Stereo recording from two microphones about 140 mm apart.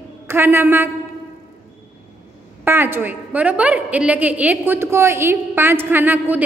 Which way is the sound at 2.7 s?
15° right (ahead or behind).